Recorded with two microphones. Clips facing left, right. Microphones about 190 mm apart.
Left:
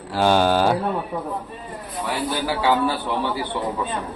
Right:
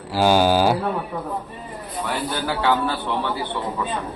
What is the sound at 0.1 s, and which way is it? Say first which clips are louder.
Speech: right 1 dB; 5° right (ahead or behind).